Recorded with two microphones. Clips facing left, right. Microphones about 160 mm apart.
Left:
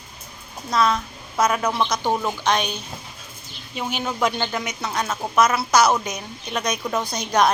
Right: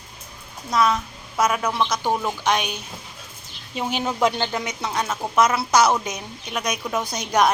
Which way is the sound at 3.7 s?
30° right (ahead or behind).